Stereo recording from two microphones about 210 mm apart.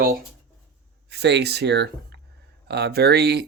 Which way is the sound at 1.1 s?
55° right (ahead or behind).